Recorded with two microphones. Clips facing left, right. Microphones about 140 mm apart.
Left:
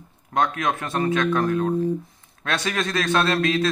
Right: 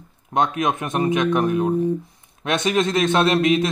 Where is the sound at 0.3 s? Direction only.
20° right (ahead or behind).